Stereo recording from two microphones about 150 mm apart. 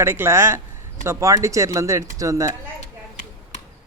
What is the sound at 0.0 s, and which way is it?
Speech, 15° right (ahead or behind).